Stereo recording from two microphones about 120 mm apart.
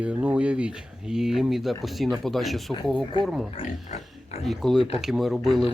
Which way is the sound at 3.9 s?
60° left (ahead or behind).